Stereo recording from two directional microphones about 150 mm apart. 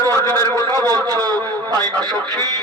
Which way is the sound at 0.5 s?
25° right (ahead or behind).